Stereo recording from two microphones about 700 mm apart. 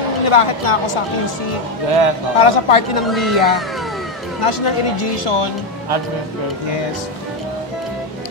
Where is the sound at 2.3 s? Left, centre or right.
Left.